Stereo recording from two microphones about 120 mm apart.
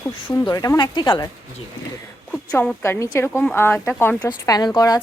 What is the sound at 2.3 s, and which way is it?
Speech, 10° left (ahead or behind).